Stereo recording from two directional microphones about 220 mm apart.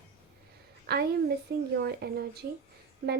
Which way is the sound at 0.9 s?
45° right (ahead or behind).